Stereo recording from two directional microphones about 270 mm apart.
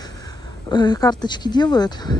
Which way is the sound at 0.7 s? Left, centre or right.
Centre.